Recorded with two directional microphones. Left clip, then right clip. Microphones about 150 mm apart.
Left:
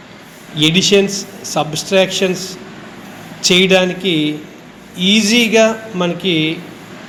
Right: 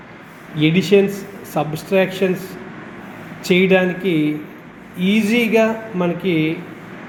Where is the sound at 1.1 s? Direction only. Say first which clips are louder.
Left 6 dB; 35° right (ahead or behind).